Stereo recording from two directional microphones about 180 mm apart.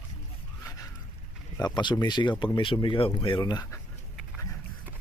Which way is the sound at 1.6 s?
25° left (ahead or behind).